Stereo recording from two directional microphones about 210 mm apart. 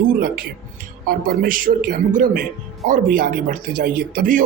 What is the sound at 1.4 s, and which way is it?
Speech, 40° right (ahead or behind).